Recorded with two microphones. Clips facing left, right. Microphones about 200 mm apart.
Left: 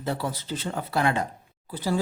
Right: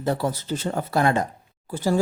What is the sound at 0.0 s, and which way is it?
Speech, 45° right (ahead or behind).